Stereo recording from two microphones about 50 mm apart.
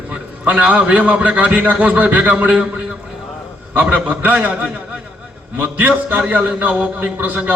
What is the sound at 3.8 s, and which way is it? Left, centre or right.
A man's voice, right.